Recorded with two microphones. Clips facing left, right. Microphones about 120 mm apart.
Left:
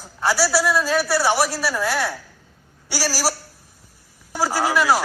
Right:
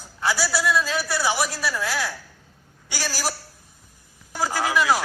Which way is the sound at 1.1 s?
60° left (ahead or behind).